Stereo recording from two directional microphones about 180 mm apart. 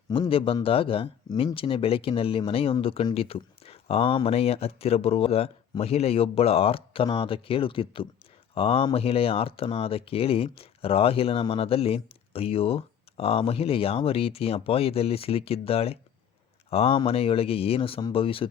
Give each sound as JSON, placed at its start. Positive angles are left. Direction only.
{"t": 0.1, "sound": "speech", "side_deg": 30}